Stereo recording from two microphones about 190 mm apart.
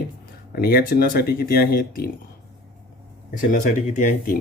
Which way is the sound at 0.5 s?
55° left (ahead or behind).